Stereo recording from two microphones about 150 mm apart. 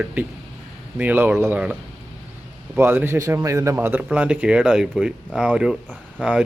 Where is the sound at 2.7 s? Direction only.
15° right (ahead or behind).